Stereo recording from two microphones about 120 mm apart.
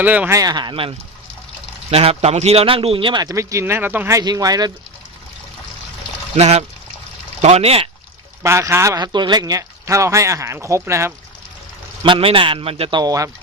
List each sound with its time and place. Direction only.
0.0 s speech: 15° right (ahead or behind)
0.3 s a man's voice: 35° right (ahead or behind); by 4.2 s 15° right (ahead or behind)
4.2 s speech: 35° right (ahead or behind)
6.3 s speech: 60° right (ahead or behind)
8.4 s speech: 25° right (ahead or behind)
9.0 s speech: 35° right (ahead or behind)
12.0 s a man's voice: 45° right (ahead or behind)
13.0 s speech: 30° right (ahead or behind)